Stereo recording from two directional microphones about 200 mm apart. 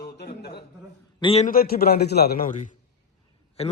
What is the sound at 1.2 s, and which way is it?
Speech, 25° left (ahead or behind).